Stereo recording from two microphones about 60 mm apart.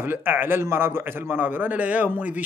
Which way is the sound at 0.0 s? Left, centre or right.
Right.